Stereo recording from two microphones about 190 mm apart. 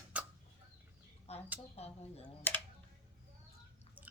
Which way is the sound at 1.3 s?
35° left (ahead or behind).